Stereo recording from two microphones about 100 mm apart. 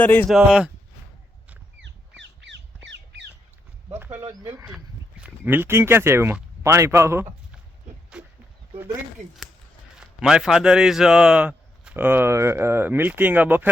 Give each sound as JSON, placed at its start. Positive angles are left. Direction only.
{"t": 0.0, "sound": "speech", "side_deg": 20}
{"t": 0.3, "sound": "a man's voice", "side_deg": -5}
{"t": 3.8, "sound": "a sound", "side_deg": -20}
{"t": 5.2, "sound": "a man's voice", "side_deg": -20}
{"t": 8.1, "sound": "a sound", "side_deg": -10}
{"t": 10.0, "sound": "a man's voice", "side_deg": -5}